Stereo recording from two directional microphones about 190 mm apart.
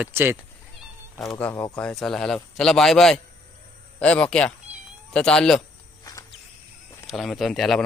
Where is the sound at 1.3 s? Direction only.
10° left (ahead or behind).